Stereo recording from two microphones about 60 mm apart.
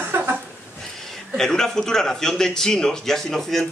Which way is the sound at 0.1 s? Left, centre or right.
Right.